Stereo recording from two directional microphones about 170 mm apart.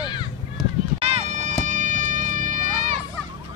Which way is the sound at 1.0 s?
35° right (ahead or behind).